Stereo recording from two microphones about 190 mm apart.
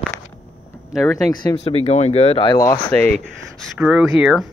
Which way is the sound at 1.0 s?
20° left (ahead or behind).